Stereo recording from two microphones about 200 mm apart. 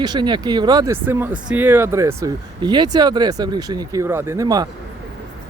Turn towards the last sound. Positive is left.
turn(degrees=-15)  # may be behind; listen again after turning